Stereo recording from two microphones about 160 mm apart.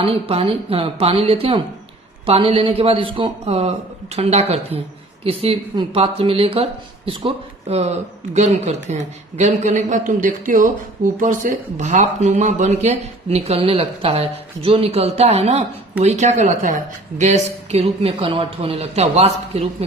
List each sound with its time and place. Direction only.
0.0 s speech: 40° right (ahead or behind)